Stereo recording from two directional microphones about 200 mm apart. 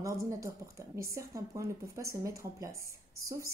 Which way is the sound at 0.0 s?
15° right (ahead or behind).